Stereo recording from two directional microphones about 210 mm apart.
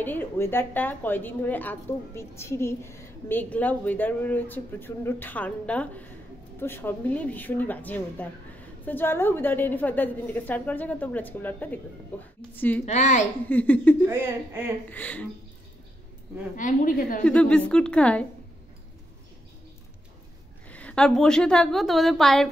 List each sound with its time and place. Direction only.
0.0 s a woman's voice: 10° left (ahead or behind)
12.8 s a woman's voice: 35° left (ahead or behind)
13.5 s a woman's voice: 10° left (ahead or behind)
14.0 s speech: 10° right (ahead or behind)
14.9 s a woman's voice: 5° left (ahead or behind)
16.5 s a woman's voice: 40° left (ahead or behind)
17.2 s a woman's voice: 5° left (ahead or behind)
20.6 s a woman's voice: 5° left (ahead or behind)